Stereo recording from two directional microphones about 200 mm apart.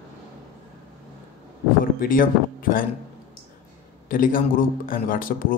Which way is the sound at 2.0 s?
45° left (ahead or behind).